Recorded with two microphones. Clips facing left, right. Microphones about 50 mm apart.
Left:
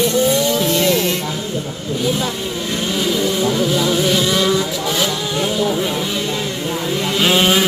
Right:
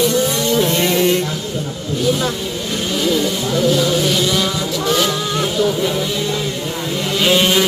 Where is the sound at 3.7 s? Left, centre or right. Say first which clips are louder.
Right 1 dB; centre.